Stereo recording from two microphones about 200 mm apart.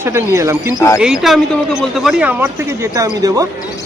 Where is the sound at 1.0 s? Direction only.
Centre (ahead or behind).